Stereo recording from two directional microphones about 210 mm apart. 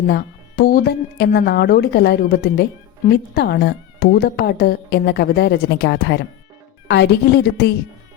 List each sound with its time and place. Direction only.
0.1 s a woman's voice: 45° left (ahead or behind)